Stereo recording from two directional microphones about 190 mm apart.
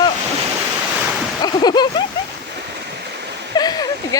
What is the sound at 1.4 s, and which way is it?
Speech, 20° left (ahead or behind).